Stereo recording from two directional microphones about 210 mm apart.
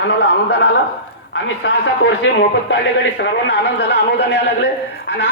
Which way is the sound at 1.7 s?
55° left (ahead or behind).